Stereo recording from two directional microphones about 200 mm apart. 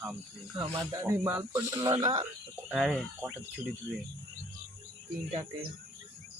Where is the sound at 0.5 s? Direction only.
20° right (ahead or behind).